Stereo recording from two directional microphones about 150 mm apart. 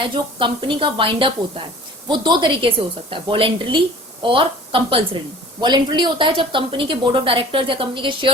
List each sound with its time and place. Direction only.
0.0 s a woman's voice: 35° right (ahead or behind)